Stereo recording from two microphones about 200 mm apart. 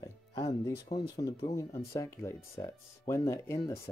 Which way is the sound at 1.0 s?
25° left (ahead or behind).